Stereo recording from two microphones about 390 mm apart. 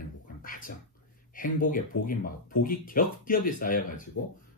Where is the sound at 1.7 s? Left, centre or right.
Left.